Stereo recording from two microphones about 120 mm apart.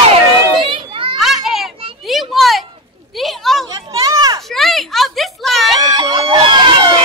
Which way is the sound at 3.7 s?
30° right (ahead or behind).